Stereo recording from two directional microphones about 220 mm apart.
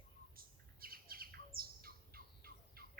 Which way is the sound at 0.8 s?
40° right (ahead or behind).